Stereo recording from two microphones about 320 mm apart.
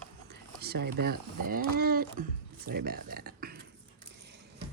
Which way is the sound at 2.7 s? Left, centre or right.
Right.